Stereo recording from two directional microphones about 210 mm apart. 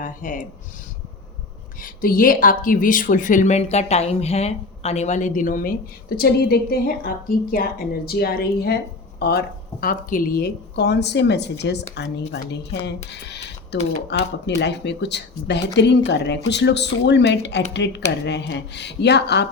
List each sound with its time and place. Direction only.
0.0 s speech: 40° left (ahead or behind)
1.8 s speech: 40° left (ahead or behind)